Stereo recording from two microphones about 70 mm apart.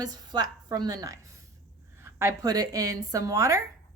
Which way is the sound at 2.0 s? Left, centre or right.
Right.